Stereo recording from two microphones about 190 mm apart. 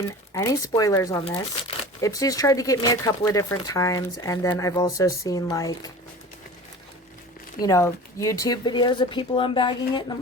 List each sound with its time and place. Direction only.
0.3 s speech: 20° left (ahead or behind)
7.6 s speech: 15° left (ahead or behind)